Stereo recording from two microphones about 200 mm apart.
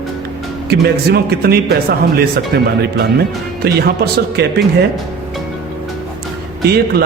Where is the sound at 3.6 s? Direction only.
50° right (ahead or behind).